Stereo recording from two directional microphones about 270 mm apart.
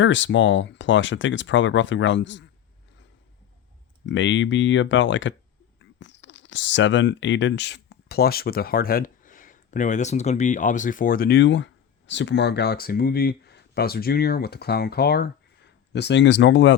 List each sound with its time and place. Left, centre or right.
0.0 s speech: left
4.0 s speech: left